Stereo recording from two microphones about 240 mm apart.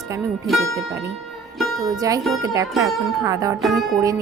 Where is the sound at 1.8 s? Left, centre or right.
Centre.